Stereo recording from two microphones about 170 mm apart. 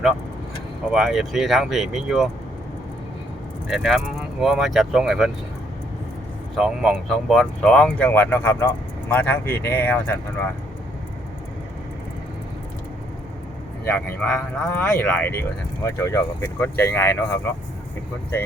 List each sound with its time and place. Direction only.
0.9 s speech: 5° right (ahead or behind)
3.7 s speech: centre (ahead or behind)
6.6 s speech: centre (ahead or behind)
13.8 s speech: 10° left (ahead or behind)